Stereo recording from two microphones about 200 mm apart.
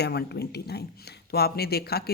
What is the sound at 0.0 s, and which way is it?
Speech, 55° left (ahead or behind).